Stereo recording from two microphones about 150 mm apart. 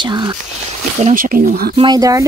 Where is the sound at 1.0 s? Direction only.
60° right (ahead or behind).